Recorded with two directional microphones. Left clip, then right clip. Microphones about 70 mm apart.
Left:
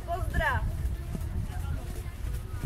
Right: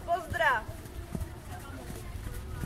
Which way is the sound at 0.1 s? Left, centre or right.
Right.